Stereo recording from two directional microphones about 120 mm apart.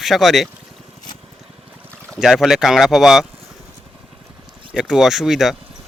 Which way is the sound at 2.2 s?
5° right (ahead or behind).